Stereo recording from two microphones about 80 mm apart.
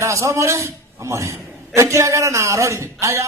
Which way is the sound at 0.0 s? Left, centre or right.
Right.